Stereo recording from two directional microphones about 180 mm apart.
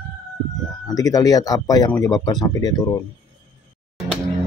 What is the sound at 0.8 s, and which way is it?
Speech, 20° left (ahead or behind).